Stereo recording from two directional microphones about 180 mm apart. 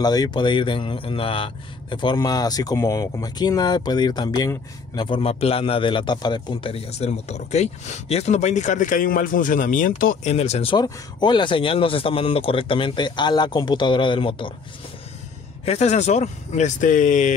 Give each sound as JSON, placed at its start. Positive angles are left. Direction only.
{"t": 0.0, "sound": "speech", "side_deg": 20}
{"t": 10.3, "sound": "speech", "side_deg": 35}
{"t": 15.6, "sound": "speech", "side_deg": 35}